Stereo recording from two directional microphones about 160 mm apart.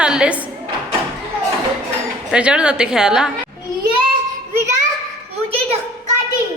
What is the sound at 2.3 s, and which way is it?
A woman's voice, 5° right (ahead or behind).